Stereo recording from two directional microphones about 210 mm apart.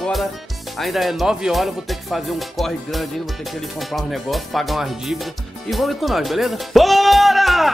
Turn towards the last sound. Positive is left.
turn(degrees=0)  # may be behind; listen again after turning